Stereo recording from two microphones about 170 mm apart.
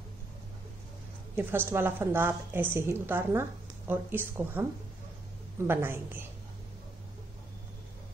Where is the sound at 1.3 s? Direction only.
10° right (ahead or behind).